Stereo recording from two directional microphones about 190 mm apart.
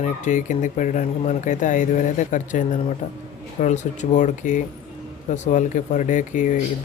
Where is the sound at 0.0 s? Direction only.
40° left (ahead or behind).